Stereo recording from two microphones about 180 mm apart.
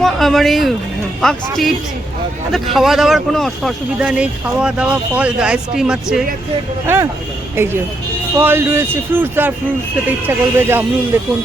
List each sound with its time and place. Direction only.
0.0 s speech: centre (ahead or behind)